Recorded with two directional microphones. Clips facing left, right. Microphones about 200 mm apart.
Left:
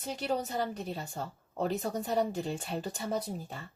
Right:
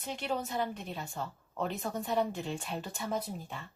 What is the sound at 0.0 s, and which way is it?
A woman's voice, 40° left (ahead or behind).